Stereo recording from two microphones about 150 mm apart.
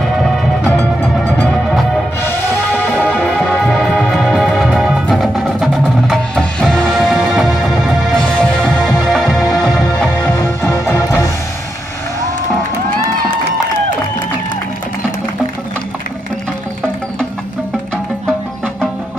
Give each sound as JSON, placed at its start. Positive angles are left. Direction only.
{"t": 0.2, "sound": "music", "side_deg": 5}
{"t": 3.0, "sound": "music", "side_deg": 10}
{"t": 10.2, "sound": "music", "side_deg": 15}